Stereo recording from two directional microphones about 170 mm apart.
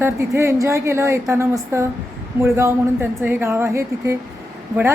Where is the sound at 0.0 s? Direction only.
15° right (ahead or behind).